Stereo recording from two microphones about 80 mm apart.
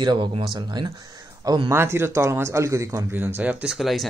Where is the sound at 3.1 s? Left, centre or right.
Right.